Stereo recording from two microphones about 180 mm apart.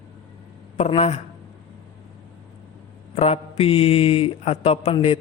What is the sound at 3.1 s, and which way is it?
A man's voice, 35° left (ahead or behind).